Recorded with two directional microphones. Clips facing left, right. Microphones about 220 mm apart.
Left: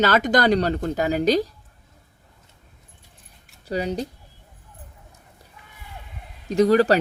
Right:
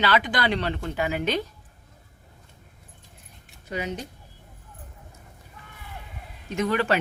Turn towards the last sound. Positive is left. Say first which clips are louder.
# left 8 dB
turn(degrees=35)  # may be behind; listen again after turning